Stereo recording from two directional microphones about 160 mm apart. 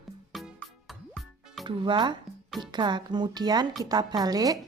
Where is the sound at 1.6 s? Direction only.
30° right (ahead or behind).